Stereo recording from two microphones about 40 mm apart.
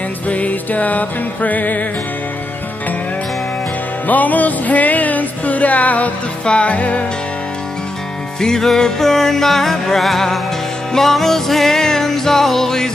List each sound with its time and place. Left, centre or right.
0.3 s music: left
4.1 s music: left
6.4 s music: left
8.4 s music: centre